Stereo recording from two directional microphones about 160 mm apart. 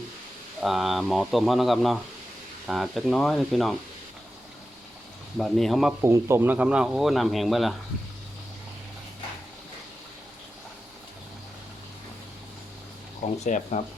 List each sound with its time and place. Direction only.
0.6 s speech: centre (ahead or behind)
5.4 s speech: centre (ahead or behind)
6.0 s speech: 15° right (ahead or behind); by 7.7 s centre (ahead or behind)
13.4 s speech: 45° left (ahead or behind)